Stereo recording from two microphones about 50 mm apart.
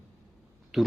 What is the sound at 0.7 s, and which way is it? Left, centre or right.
Speech, centre.